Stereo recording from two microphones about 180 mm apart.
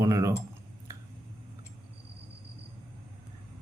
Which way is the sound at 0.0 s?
15° right (ahead or behind).